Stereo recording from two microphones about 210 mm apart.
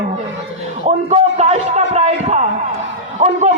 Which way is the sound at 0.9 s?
30° right (ahead or behind).